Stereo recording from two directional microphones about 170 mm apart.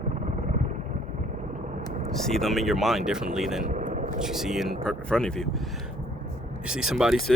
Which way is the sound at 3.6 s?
50° right (ahead or behind).